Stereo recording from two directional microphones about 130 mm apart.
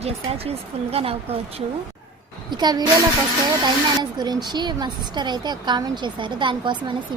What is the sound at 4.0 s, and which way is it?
A woman's voice, 35° right (ahead or behind).